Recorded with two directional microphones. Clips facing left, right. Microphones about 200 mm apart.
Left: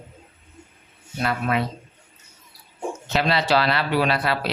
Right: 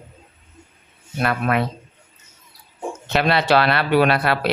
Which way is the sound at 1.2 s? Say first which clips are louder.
Right 3 dB; 60° right (ahead or behind).